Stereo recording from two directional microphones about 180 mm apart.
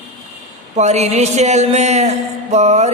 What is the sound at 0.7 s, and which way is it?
Speech, 40° right (ahead or behind).